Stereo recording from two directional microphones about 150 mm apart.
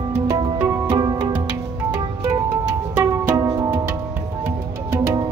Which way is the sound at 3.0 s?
20° right (ahead or behind).